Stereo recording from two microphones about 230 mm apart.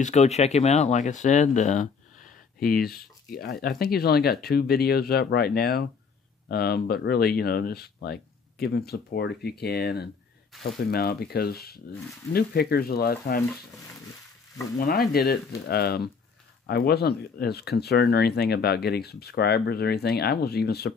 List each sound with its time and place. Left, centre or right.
0.0 s speech: left
10.5 s speech: centre
10.9 s speech: left
14.8 s speech: left